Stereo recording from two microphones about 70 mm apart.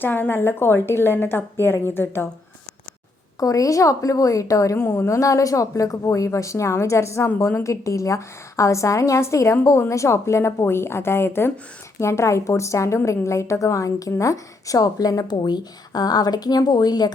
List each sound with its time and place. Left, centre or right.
0.0 s a woman's voice: left
3.4 s a woman's voice: left
4.8 s a woman's voice: left
5.0 s a woman's voice: left